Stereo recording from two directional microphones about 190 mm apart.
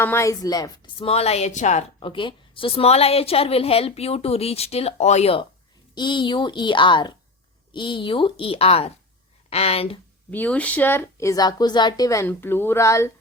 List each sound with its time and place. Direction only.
0.0 s a woman's voice: 15° left (ahead or behind); by 2.0 s 40° left (ahead or behind)
2.0 s a woman's voice: 25° left (ahead or behind)
10.3 s speech: 10° left (ahead or behind)